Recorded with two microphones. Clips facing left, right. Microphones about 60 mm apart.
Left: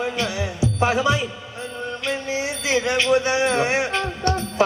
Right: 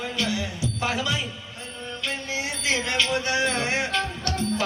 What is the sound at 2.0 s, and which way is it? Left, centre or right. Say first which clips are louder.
Music: left 4 dB; left.